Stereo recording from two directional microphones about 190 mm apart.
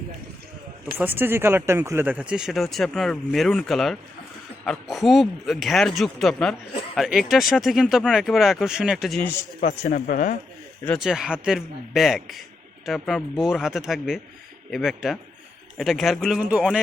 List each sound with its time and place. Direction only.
0.9 s speech: 10° right (ahead or behind)
9.6 s speech: 35° left (ahead or behind)
10.1 s speech: 45° left (ahead or behind)
10.8 s speech: centre (ahead or behind)